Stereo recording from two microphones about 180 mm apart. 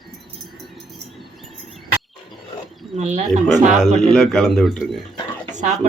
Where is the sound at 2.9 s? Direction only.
40° right (ahead or behind).